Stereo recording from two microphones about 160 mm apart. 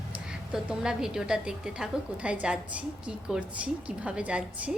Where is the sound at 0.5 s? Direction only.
5° right (ahead or behind).